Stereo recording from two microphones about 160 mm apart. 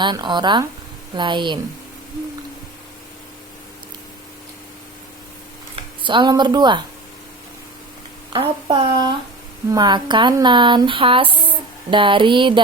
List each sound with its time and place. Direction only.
0.0 s speech: 30° right (ahead or behind)
5.7 s speech: 30° right (ahead or behind)
8.3 s speech: 30° right (ahead or behind)